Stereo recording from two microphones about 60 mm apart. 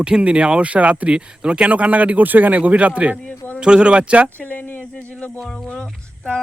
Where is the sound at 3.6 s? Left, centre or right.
Centre.